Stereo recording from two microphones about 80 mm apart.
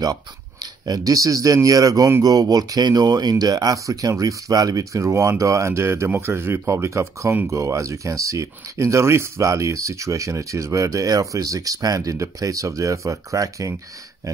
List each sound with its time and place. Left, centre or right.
0.0 s speech: right